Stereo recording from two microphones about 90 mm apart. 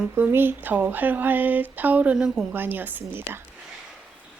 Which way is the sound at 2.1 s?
5° right (ahead or behind).